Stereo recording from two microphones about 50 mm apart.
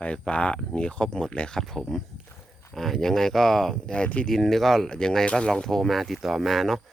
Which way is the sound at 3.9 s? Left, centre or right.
Left.